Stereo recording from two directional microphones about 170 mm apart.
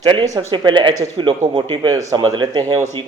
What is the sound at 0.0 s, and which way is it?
A man's voice, 25° right (ahead or behind).